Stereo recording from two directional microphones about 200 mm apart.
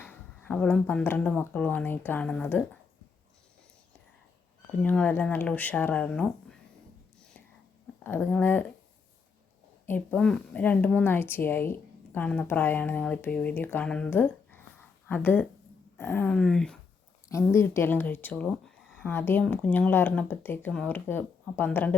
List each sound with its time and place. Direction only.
0.0 s speech: 10° left (ahead or behind)
4.8 s speech: 5° left (ahead or behind)
7.9 s speech: 10° left (ahead or behind)
9.8 s speech: 10° left (ahead or behind)